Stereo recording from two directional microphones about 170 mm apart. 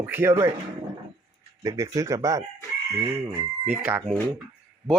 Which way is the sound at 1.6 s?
20° right (ahead or behind).